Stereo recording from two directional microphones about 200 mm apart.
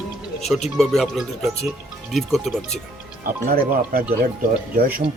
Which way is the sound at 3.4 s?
50° right (ahead or behind).